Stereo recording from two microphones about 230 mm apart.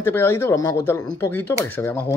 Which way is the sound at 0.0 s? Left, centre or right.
Centre.